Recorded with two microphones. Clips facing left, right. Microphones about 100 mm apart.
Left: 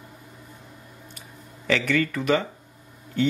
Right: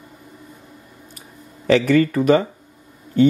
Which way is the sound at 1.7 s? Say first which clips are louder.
Right 8 dB; 40° right (ahead or behind).